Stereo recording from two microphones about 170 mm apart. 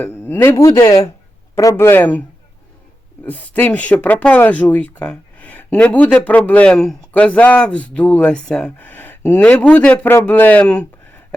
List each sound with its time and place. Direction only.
0.0 s speech: 15° left (ahead or behind)
3.2 s speech: 10° left (ahead or behind)